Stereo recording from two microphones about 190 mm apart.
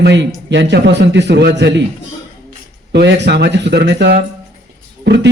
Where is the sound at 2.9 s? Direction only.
65° right (ahead or behind).